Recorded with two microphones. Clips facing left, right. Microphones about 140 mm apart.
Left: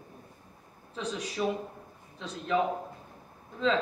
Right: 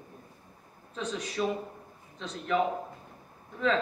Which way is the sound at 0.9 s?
10° left (ahead or behind).